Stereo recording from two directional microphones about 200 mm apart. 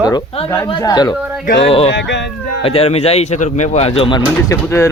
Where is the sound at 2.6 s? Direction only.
30° left (ahead or behind).